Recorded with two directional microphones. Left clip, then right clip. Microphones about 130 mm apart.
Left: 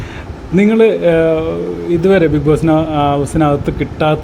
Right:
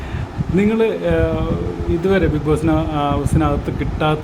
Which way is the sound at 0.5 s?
35° left (ahead or behind).